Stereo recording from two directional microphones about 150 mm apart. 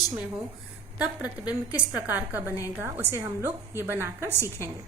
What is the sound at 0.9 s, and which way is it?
A woman's voice, 10° right (ahead or behind).